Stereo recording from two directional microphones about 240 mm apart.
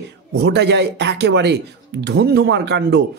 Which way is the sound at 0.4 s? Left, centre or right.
Right.